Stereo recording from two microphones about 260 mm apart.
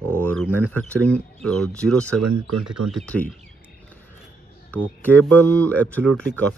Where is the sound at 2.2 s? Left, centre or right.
Right.